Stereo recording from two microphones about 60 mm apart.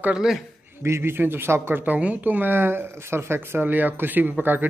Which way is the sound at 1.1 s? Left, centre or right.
Right.